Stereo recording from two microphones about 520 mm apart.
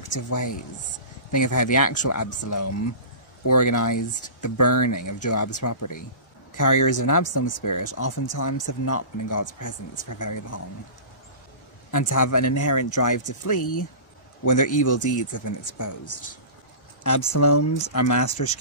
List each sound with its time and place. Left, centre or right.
0.1 s speech: left
11.9 s speech: left